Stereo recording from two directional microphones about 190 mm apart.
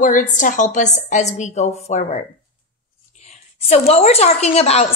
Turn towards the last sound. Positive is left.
turn(degrees=30)  # may be behind; listen again after turning